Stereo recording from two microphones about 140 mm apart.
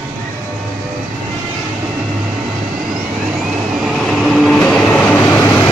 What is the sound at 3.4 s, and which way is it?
Train, centre (ahead or behind).